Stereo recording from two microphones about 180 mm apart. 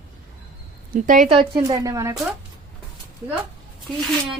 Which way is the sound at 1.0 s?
45° right (ahead or behind).